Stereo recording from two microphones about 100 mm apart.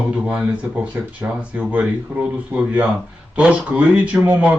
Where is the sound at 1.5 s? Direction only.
15° right (ahead or behind).